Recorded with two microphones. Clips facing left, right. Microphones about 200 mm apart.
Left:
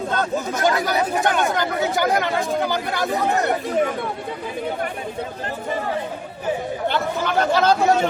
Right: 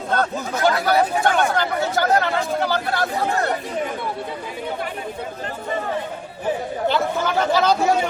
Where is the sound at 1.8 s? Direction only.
15° left (ahead or behind).